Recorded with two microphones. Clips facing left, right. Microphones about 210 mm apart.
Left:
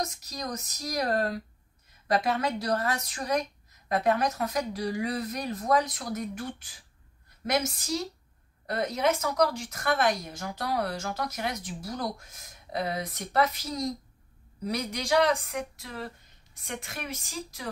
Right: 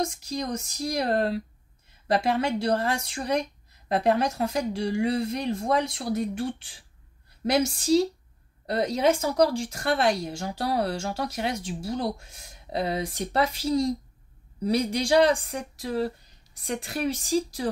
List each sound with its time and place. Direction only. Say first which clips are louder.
0.0 s speech: right 5 dB; 30° right (ahead or behind)